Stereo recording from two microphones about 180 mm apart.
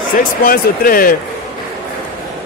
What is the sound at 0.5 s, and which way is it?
Speech, 55° left (ahead or behind).